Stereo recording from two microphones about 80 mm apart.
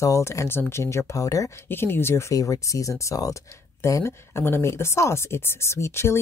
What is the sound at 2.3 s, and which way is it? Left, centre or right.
Speech, left.